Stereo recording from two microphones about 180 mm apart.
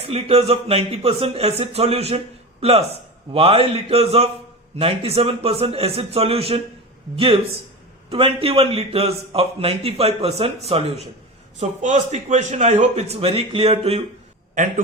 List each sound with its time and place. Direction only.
0.1 s a man's voice: 35° right (ahead or behind)
8.1 s a man's voice: 30° right (ahead or behind)